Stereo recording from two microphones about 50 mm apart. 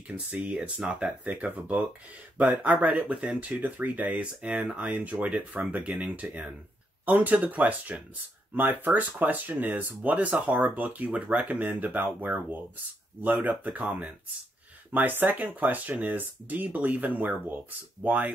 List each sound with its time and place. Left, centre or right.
0.5 s speech: right